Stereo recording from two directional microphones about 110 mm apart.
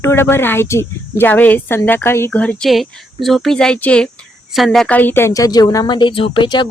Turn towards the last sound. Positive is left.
turn(degrees=45)  # may be behind; listen again after turning